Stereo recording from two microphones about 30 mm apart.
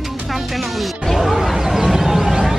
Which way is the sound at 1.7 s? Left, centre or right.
Centre.